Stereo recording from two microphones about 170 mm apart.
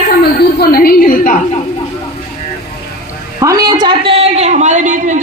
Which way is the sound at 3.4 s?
20° right (ahead or behind).